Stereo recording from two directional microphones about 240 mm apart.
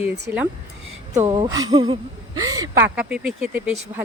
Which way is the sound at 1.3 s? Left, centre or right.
Centre.